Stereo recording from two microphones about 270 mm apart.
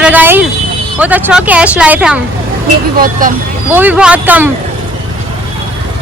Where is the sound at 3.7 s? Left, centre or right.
Centre.